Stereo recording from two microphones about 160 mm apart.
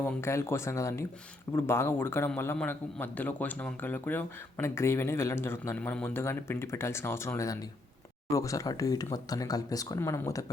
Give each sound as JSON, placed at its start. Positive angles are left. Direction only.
{"t": 0.0, "sound": "a man's voice", "side_deg": 15}